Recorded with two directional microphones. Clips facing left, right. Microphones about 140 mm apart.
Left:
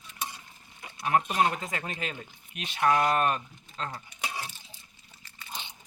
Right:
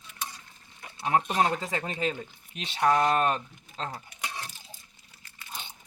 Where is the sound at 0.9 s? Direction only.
25° right (ahead or behind).